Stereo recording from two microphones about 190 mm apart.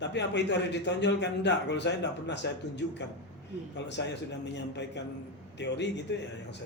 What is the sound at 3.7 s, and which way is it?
A man's voice, 65° left (ahead or behind).